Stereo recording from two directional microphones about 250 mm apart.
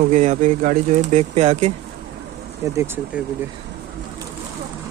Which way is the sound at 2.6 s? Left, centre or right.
Centre.